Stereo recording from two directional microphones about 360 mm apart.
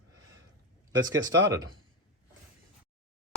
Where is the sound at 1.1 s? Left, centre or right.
Right.